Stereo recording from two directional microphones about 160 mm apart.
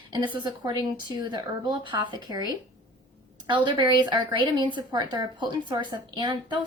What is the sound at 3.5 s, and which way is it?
Speech, 30° right (ahead or behind).